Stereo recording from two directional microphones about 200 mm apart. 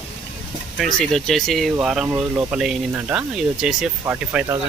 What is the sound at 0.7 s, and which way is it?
Speech, centre (ahead or behind).